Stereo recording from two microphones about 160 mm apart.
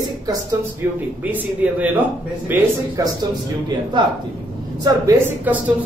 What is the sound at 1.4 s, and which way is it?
Speech, 10° right (ahead or behind).